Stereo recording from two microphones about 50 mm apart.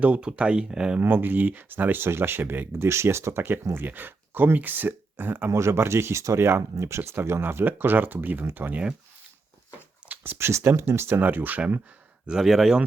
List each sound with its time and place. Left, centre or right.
0.0 s speech: right
0.9 s speech: right
2.8 s speech: right
3.8 s speech: right
5.5 s speech: right
7.4 s speech: right
10.3 s speech: right
11.1 s speech: right
12.5 s speech: centre